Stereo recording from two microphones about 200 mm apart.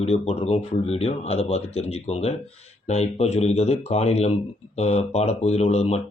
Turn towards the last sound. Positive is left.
turn(degrees=30)  # may be behind; listen again after turning